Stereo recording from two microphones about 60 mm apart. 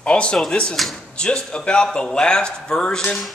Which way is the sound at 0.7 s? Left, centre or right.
Centre.